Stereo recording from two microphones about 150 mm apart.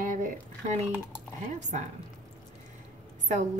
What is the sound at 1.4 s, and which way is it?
Speech, 50° right (ahead or behind).